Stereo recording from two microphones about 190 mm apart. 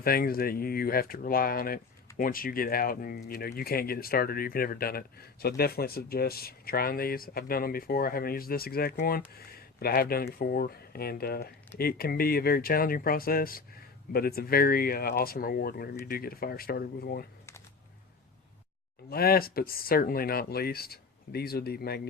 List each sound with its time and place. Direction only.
0.0 s speech: 50° left (ahead or behind)
19.1 s speech: 55° left (ahead or behind)